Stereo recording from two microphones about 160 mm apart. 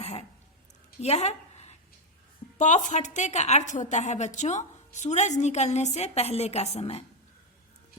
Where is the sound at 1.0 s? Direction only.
40° left (ahead or behind).